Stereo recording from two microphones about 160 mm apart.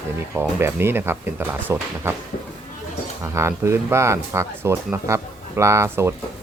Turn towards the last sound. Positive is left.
turn(degrees=-15)  # may be behind; listen again after turning